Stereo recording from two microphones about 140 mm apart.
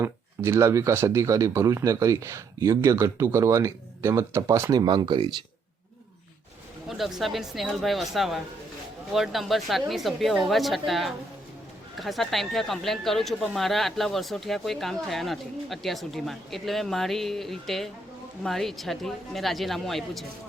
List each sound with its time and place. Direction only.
0.0 s speech: 20° right (ahead or behind)
6.8 s speech: centre (ahead or behind)